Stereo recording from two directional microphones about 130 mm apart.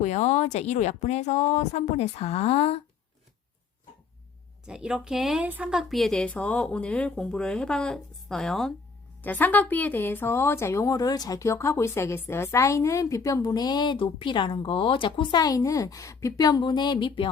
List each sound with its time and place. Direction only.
0.0 s speech: 60° left (ahead or behind)
4.6 s a woman's voice: 5° right (ahead or behind); by 17.2 s 40° left (ahead or behind)